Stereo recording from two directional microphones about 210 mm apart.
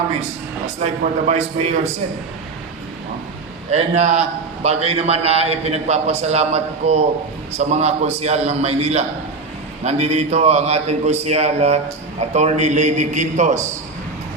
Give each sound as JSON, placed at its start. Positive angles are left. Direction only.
{"t": 1.3, "sound": "a man's voice", "side_deg": -30}
{"t": 3.7, "sound": "a man's voice", "side_deg": -30}